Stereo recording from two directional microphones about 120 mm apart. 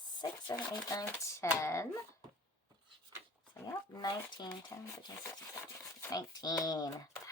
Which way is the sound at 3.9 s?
35° left (ahead or behind).